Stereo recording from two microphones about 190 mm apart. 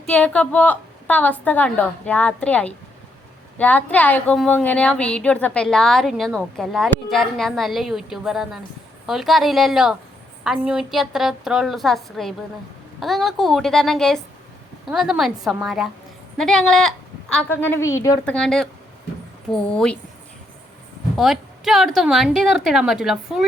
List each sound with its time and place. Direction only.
0.0 s a woman's voice: 5° left (ahead or behind)
18.3 s a woman's voice: 5° left (ahead or behind)
21.2 s a woman's voice: centre (ahead or behind)